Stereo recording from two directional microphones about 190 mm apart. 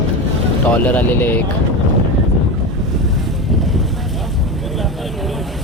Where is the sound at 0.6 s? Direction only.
10° left (ahead or behind).